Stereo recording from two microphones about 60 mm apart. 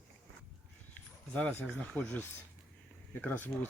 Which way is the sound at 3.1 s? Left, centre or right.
Left.